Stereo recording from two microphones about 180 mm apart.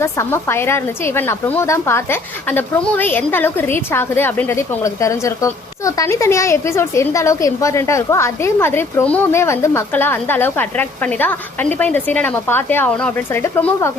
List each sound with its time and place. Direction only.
0.0 s a woman's voice: 15° left (ahead or behind)